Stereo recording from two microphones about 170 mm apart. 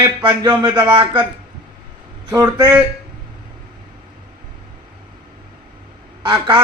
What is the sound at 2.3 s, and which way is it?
Speech, 25° right (ahead or behind).